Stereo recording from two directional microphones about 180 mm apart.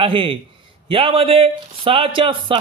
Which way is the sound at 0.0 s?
30° right (ahead or behind).